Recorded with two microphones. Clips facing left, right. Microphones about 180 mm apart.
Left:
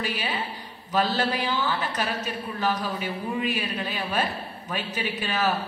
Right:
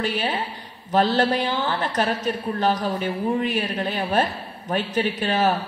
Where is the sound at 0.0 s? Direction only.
45° right (ahead or behind).